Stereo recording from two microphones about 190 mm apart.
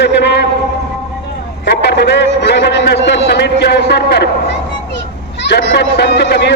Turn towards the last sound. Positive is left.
turn(degrees=65)  # may be behind; listen again after turning